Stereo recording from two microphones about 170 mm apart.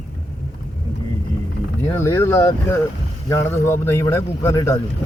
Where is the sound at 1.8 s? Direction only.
15° left (ahead or behind).